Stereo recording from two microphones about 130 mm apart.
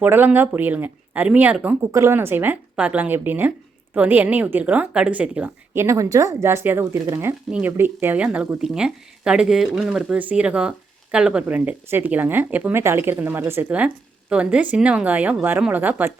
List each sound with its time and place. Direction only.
0.0 s speech: 15° right (ahead or behind)
1.9 s speech: 20° right (ahead or behind)
5.7 s speech: 25° right (ahead or behind)